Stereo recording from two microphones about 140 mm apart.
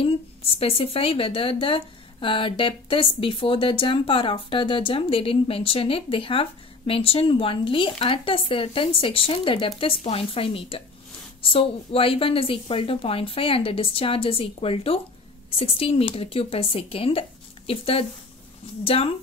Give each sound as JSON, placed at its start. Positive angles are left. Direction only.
{"t": 0.0, "sound": "a woman's voice", "side_deg": 45}